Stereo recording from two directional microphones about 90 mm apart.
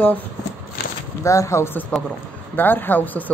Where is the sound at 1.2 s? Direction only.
40° left (ahead or behind).